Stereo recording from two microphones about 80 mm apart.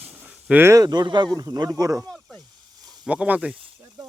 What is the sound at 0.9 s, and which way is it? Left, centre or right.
Speech, right.